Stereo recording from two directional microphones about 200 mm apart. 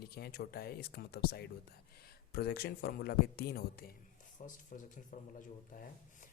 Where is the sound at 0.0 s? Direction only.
50° left (ahead or behind).